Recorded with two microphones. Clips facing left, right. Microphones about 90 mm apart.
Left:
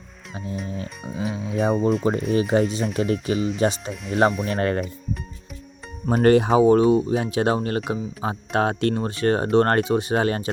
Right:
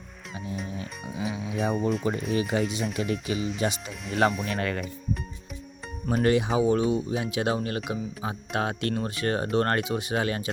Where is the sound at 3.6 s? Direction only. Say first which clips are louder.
Left 6 dB; 40° left (ahead or behind).